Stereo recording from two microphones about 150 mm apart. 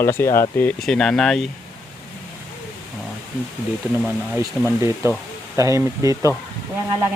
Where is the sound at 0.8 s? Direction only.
5° left (ahead or behind).